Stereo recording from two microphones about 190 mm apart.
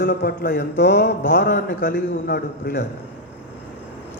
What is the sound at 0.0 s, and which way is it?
Speech, 50° left (ahead or behind).